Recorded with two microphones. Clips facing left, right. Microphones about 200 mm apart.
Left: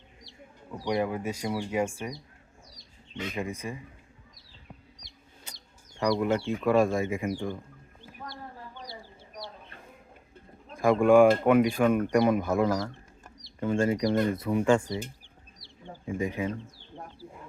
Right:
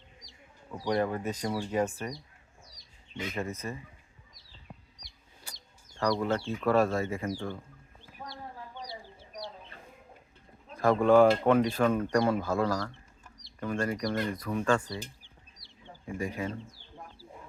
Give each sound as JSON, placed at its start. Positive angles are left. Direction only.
{"t": 0.9, "sound": "speech", "side_deg": 10}
{"t": 3.3, "sound": "speech", "side_deg": 15}
{"t": 5.5, "sound": "chicken", "side_deg": 20}
{"t": 6.0, "sound": "speech", "side_deg": 15}
{"t": 10.8, "sound": "speech", "side_deg": 10}
{"t": 16.0, "sound": "speech", "side_deg": 20}